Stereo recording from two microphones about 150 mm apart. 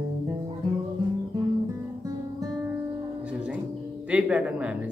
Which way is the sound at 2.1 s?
25° right (ahead or behind).